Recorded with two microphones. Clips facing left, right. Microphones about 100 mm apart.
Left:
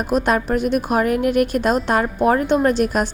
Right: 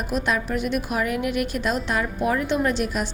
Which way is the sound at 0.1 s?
45° left (ahead or behind).